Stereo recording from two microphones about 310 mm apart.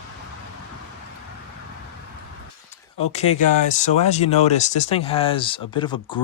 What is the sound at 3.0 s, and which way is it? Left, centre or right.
Speech, left.